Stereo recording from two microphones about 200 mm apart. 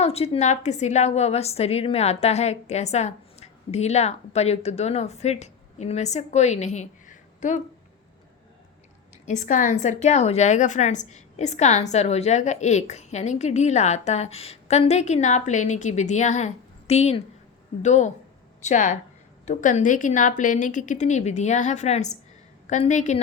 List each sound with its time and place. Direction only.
0.0 s a woman's voice: 30° left (ahead or behind)
9.2 s a woman's voice: 40° left (ahead or behind)